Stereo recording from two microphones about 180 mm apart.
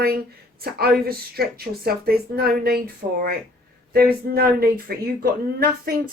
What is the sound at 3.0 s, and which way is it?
Speech, 30° right (ahead or behind).